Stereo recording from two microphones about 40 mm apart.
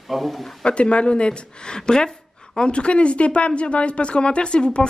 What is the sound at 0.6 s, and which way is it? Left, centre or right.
Speech, left.